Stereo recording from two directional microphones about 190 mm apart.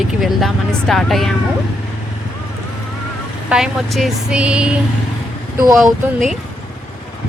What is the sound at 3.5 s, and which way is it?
Speech, centre (ahead or behind).